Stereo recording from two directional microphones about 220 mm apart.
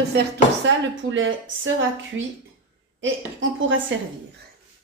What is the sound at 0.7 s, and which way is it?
Speech, 60° right (ahead or behind).